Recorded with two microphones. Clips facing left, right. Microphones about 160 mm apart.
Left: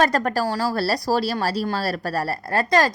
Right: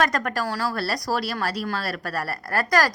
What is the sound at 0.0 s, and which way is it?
A woman's voice, 30° left (ahead or behind).